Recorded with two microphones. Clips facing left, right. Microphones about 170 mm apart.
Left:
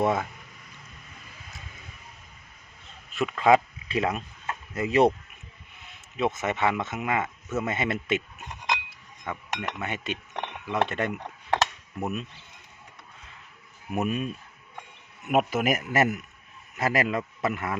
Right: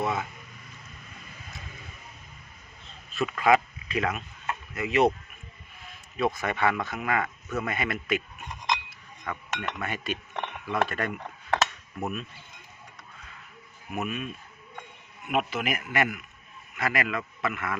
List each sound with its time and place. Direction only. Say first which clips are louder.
0.0 s a man's voice: left 4 dB; 40° left (ahead or behind)
3.1 s a man's voice: left 2 dB; 15° left (ahead or behind)
6.1 s speech: left 1 dB; 20° left (ahead or behind)
9.2 s speech: left 1 dB; 15° left (ahead or behind)
13.9 s a man's voice: left 4 dB; 35° left (ahead or behind)
15.3 s a man's voice: left 5 dB; 45° left (ahead or behind)